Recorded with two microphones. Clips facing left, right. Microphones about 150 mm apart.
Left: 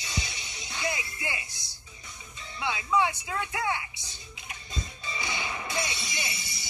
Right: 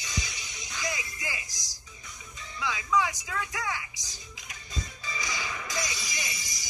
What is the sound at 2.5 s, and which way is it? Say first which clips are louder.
Speech: left 1 dB; 30° left (ahead or behind).